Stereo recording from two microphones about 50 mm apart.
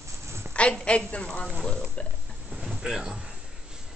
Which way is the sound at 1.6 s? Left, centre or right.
Centre.